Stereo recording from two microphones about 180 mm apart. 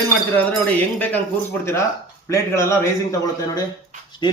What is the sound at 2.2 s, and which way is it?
Speech, 15° left (ahead or behind).